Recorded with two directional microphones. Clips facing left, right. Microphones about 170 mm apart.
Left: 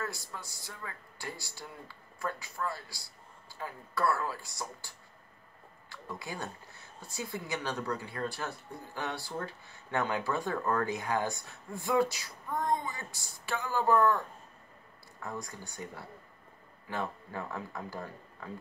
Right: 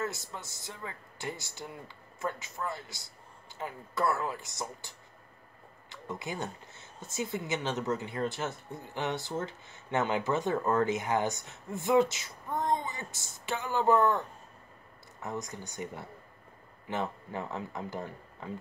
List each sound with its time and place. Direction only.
0.0 s speech: 20° right (ahead or behind)
15.2 s speech: 20° right (ahead or behind)